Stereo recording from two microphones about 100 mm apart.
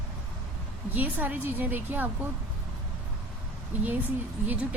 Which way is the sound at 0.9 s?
15° right (ahead or behind).